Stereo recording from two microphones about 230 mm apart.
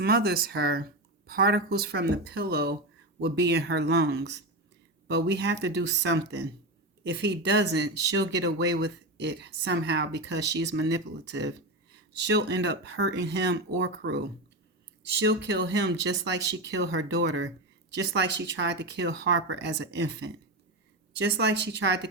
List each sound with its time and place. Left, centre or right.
0.0 s speech: right